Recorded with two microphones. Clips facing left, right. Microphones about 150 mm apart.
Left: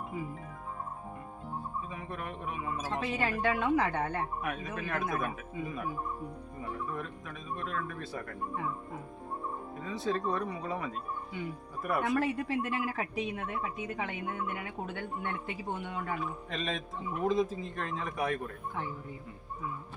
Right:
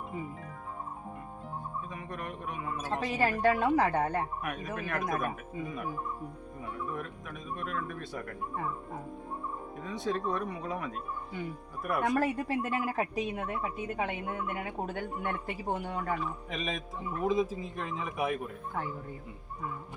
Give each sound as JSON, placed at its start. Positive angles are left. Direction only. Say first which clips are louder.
{"t": 1.9, "sound": "speech", "louder": "even", "side_deg": 5}
{"t": 2.9, "sound": "speech", "louder": "right 4 dB", "side_deg": -40}
{"t": 4.4, "sound": "speech", "louder": "even", "side_deg": 0}
{"t": 5.0, "sound": "speech", "louder": "right 2 dB", "side_deg": -50}
{"t": 6.6, "sound": "speech", "louder": "even", "side_deg": -5}
{"t": 9.8, "sound": "speech", "louder": "even", "side_deg": 0}
{"t": 12.1, "sound": "speech", "louder": "right 1 dB", "side_deg": -40}
{"t": 16.5, "sound": "speech", "louder": "even", "side_deg": -5}